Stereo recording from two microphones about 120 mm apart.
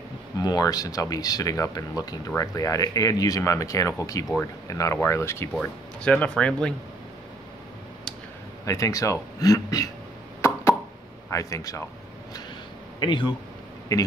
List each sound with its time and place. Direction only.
0.4 s speech: 30° left (ahead or behind)
5.6 s speech: 10° left (ahead or behind)
8.6 s speech: 25° left (ahead or behind)
10.4 s plop: 25° left (ahead or behind)
11.2 s speech: 25° left (ahead or behind)
13.0 s speech: 40° left (ahead or behind)
13.9 s speech: 30° left (ahead or behind)